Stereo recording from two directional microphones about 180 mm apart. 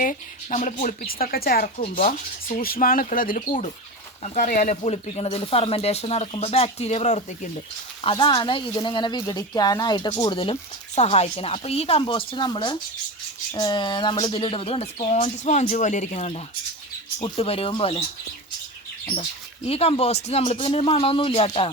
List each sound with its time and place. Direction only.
0.0 s speech: 45° left (ahead or behind)
1.8 s speech: 40° left (ahead or behind)
8.0 s speech: 30° left (ahead or behind)
19.6 s speech: 35° left (ahead or behind)